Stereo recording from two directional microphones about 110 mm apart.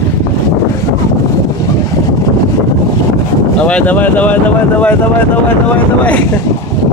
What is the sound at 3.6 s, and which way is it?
Speech, 15° left (ahead or behind).